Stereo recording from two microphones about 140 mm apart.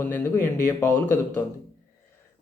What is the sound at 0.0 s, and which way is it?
Speech, 15° left (ahead or behind).